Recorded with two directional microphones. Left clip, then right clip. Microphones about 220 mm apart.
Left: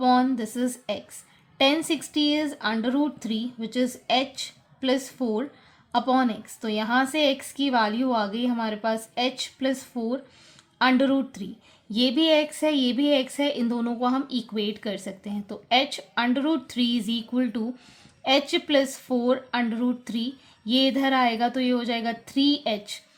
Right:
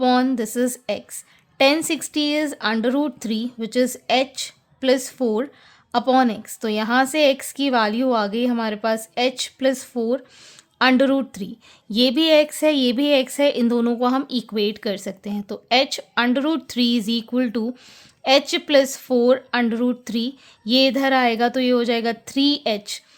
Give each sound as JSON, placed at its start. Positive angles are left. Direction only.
{"t": 0.0, "sound": "speech", "side_deg": -45}